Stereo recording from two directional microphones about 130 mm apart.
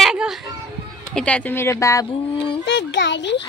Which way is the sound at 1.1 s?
10° left (ahead or behind).